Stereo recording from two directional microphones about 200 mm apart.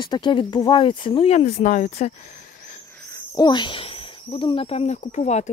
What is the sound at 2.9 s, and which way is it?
Speech, 15° left (ahead or behind).